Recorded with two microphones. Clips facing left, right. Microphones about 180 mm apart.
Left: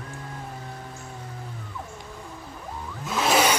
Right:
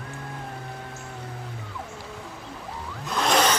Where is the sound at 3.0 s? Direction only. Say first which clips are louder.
Left 1 dB; 5° left (ahead or behind).